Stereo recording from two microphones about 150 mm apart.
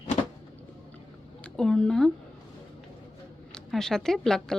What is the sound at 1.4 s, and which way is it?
Speech, 5° left (ahead or behind).